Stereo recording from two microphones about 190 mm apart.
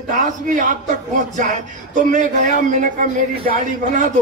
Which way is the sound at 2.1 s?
40° right (ahead or behind).